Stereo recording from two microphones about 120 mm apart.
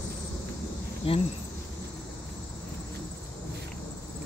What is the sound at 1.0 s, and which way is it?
Speech, 50° left (ahead or behind).